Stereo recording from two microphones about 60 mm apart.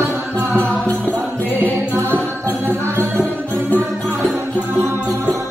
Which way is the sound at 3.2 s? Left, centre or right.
Left.